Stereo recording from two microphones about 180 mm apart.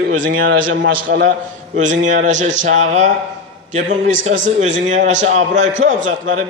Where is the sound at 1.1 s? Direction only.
70° right (ahead or behind).